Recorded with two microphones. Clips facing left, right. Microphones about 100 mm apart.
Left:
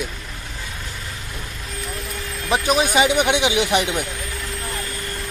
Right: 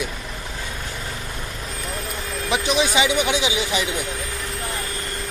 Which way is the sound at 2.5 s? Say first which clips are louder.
Left 2 dB; 45° left (ahead or behind).